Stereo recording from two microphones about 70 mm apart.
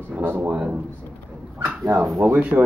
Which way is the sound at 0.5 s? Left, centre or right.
Centre.